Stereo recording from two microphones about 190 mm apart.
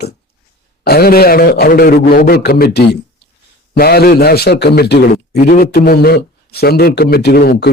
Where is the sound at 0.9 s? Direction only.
55° left (ahead or behind).